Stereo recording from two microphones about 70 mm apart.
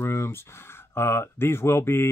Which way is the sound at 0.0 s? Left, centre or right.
Left.